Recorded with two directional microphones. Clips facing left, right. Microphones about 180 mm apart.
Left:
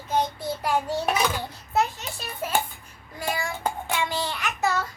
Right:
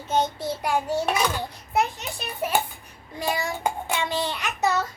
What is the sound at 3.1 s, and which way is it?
Child singing, 20° right (ahead or behind).